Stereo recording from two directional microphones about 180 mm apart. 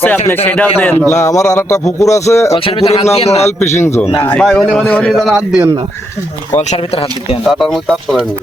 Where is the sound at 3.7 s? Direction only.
15° left (ahead or behind).